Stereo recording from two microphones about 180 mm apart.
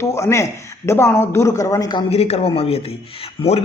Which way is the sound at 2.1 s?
35° left (ahead or behind).